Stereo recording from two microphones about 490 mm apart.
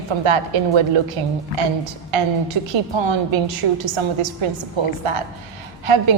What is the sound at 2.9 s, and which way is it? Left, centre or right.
A woman's voice, right.